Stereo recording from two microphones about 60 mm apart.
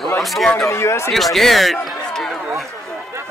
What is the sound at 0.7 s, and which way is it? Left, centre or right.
Speech, left.